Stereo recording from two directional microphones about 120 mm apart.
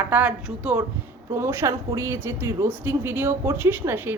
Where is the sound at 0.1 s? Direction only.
10° right (ahead or behind).